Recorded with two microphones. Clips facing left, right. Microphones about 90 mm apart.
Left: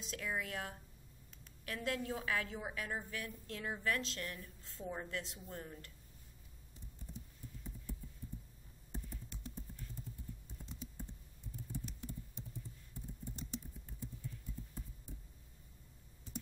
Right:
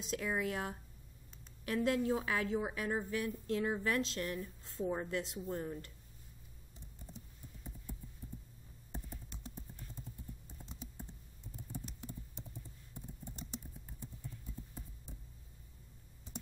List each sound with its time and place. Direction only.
0.0 s a woman's voice: 20° right (ahead or behind)
8.9 s computer keyboard: 20° right (ahead or behind)
13.4 s typing: 20° right (ahead or behind)